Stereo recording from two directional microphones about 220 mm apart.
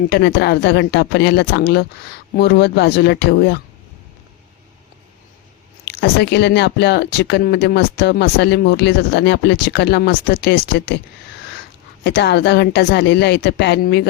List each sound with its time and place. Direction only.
0.1 s speech: 50° left (ahead or behind)
5.8 s speech: 50° left (ahead or behind)
12.0 s speech: 50° left (ahead or behind)